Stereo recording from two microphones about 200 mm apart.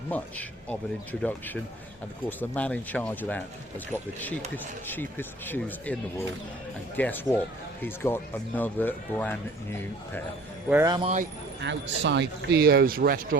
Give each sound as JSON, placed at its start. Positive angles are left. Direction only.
{"t": 0.1, "sound": "speech", "side_deg": 5}
{"t": 2.4, "sound": "speech", "side_deg": 5}
{"t": 10.7, "sound": "speech", "side_deg": -10}
{"t": 10.9, "sound": "speech", "side_deg": -30}
{"t": 11.6, "sound": "speech", "side_deg": -60}